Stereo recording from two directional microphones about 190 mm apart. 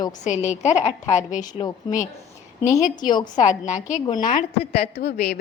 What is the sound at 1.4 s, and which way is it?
Speech, 20° left (ahead or behind).